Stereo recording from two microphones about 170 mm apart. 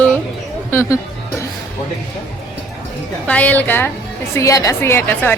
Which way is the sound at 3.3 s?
10° left (ahead or behind).